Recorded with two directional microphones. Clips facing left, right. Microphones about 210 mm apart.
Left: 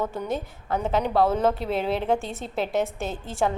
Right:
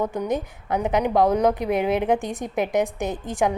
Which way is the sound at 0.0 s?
15° right (ahead or behind).